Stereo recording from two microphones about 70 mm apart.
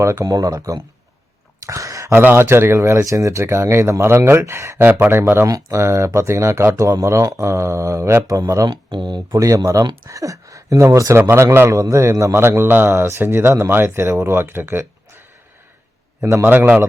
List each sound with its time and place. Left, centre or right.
0.0 s speech: right
0.3 s speech: right
1.6 s a sound: right
2.1 s speech: right
4.8 s speech: right
5.5 s speech: right
8.9 s speech: right
10.1 s speech: right
16.4 s a man's voice: right